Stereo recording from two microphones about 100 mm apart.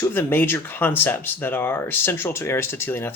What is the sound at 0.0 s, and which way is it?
Speech, 20° left (ahead or behind).